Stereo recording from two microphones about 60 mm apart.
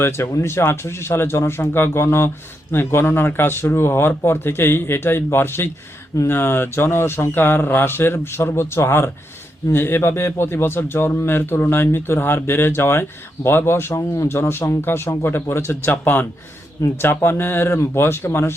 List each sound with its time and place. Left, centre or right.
0.0 s a man's voice: left
15.9 s speech: left
16.8 s speech: left
17.2 s a man's voice: left